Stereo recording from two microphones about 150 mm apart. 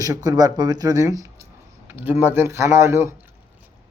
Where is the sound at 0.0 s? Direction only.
25° right (ahead or behind).